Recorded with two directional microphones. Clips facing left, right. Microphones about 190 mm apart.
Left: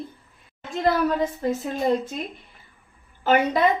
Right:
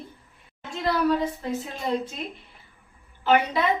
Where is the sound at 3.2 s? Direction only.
45° left (ahead or behind).